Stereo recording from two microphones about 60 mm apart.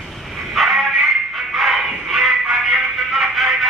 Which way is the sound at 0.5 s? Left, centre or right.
Centre.